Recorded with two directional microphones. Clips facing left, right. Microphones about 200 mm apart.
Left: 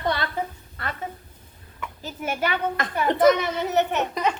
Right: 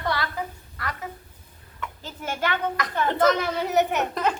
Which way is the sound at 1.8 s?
10° left (ahead or behind).